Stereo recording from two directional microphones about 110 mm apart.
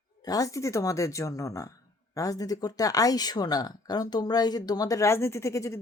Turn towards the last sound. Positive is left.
turn(degrees=25)  # may be behind; listen again after turning